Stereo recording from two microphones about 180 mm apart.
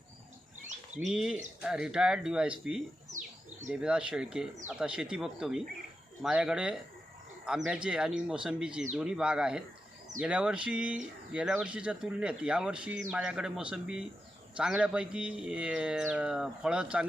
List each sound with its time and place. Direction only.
0.9 s speech: 5° right (ahead or behind)